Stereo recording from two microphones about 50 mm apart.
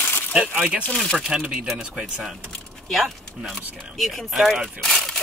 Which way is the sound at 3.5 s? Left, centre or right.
Centre.